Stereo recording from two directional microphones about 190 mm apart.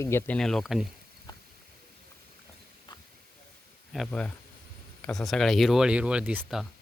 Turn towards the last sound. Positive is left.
turn(degrees=-5)  # may be behind; listen again after turning